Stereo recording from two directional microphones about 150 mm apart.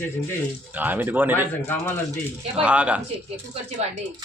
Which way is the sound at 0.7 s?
10° right (ahead or behind).